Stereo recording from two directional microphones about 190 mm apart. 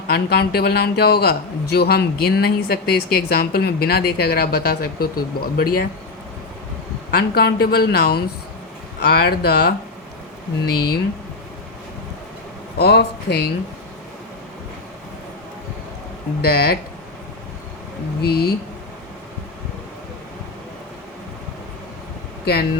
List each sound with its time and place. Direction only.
0.1 s a man's voice: 55° left (ahead or behind)
7.1 s a man's voice: 55° left (ahead or behind)
10.8 s a man's voice: 55° left (ahead or behind)
12.8 s a man's voice: 60° left (ahead or behind)
16.4 s a man's voice: 55° left (ahead or behind)
18.2 s a man's voice: 55° left (ahead or behind)